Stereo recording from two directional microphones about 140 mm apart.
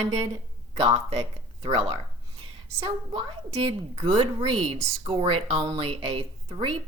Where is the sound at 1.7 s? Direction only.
40° right (ahead or behind).